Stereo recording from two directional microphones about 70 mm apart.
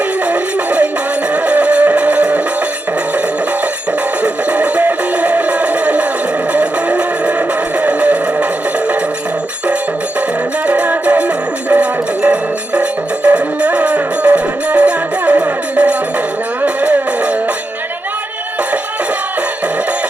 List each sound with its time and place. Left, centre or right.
0.3 s music: centre
4.2 s music: centre
10.7 s music: centre